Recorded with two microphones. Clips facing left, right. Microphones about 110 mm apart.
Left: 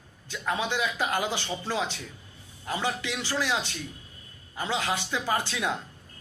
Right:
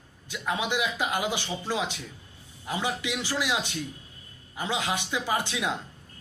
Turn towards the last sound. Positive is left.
turn(degrees=-15)  # may be behind; listen again after turning